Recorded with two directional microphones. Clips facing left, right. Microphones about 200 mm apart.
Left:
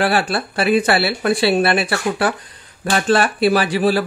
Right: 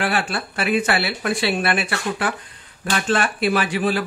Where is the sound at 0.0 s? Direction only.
35° left (ahead or behind).